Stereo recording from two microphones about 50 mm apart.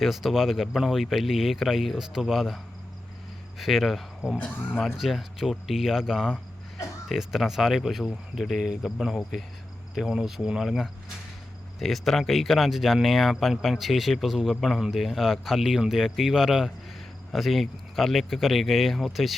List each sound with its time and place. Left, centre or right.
0.0 s speech: centre
3.6 s speech: centre
4.4 s speech: left
4.8 s speech: centre
9.0 s cricket: centre
10.2 s speech: centre
10.5 s cricket: centre
11.8 s speech: centre